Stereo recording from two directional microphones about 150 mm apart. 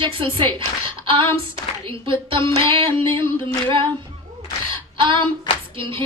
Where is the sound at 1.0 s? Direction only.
35° right (ahead or behind).